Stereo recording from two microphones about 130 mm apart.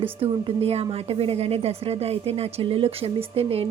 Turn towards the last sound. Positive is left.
turn(degrees=-50)  # may be behind; listen again after turning